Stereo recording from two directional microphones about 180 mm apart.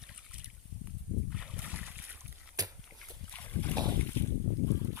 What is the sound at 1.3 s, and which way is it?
Boat, 5° right (ahead or behind).